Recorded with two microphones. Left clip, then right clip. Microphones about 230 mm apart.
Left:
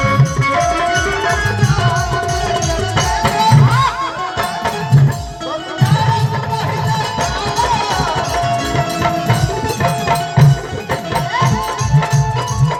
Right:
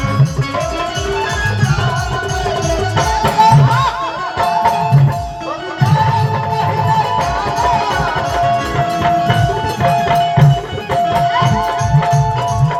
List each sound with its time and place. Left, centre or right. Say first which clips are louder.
3.2 s music: right 4 dB; left